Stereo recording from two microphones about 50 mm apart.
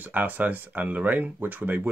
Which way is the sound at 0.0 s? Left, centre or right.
Right.